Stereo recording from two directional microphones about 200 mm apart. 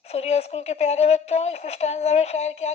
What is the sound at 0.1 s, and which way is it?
A woman's voice, 30° left (ahead or behind).